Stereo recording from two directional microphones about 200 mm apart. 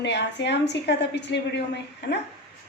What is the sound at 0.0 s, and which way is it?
A woman's voice, 60° left (ahead or behind).